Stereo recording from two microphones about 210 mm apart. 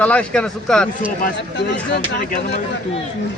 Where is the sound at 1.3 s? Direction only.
55° left (ahead or behind).